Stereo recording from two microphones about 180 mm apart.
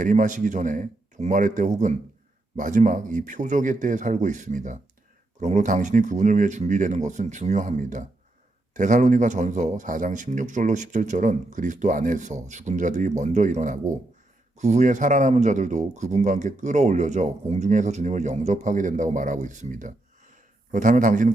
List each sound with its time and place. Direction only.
0.0 s a man's voice: 45° right (ahead or behind)